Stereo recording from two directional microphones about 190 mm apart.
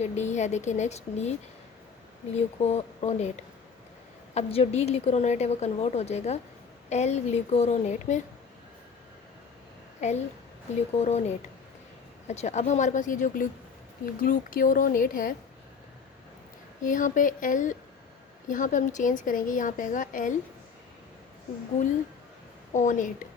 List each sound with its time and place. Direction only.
0.0 s a woman's voice: 35° left (ahead or behind)
10.0 s a woman's voice: 35° left (ahead or behind)
16.8 s a woman's voice: 45° left (ahead or behind)
22.7 s a woman's voice: 40° left (ahead or behind)